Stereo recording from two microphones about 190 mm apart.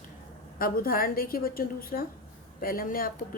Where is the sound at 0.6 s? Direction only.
50° left (ahead or behind).